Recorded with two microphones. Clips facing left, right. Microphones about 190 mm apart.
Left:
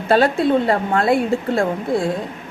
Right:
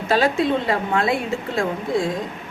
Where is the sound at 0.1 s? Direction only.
55° left (ahead or behind).